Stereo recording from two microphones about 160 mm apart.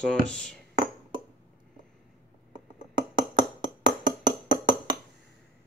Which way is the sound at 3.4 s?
25° right (ahead or behind).